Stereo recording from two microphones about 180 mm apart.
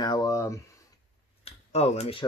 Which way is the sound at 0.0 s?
20° left (ahead or behind).